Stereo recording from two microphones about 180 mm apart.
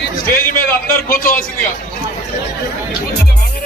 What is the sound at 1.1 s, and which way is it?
Speech, 50° left (ahead or behind).